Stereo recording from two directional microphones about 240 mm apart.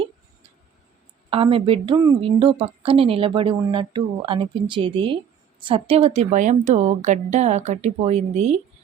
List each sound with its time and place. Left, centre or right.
1.3 s a woman's voice: right